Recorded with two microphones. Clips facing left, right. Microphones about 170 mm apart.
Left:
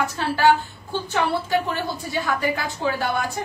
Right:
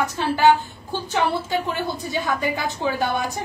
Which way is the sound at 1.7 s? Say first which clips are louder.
Right 1 dB; 20° right (ahead or behind).